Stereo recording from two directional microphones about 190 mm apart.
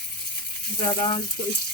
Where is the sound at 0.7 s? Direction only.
25° left (ahead or behind).